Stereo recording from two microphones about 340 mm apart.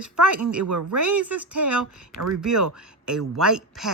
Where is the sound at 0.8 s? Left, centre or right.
Right.